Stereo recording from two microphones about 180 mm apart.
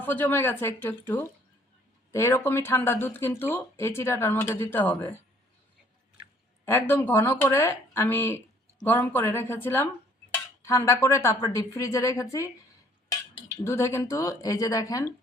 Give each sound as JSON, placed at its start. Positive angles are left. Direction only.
{"t": 0.0, "sound": "speech", "side_deg": 10}
{"t": 6.7, "sound": "speech", "side_deg": 10}
{"t": 13.7, "sound": "speech", "side_deg": 15}